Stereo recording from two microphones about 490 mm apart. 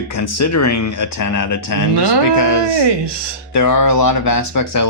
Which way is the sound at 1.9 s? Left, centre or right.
Right.